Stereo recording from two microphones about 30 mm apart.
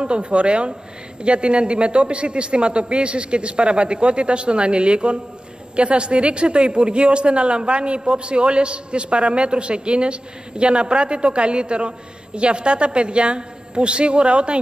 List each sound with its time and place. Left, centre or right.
0.0 s a woman's voice: right